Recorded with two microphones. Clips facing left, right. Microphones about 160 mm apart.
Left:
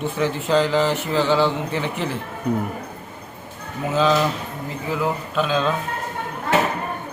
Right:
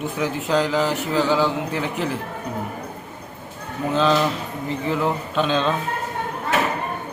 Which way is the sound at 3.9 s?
Centre (ahead or behind).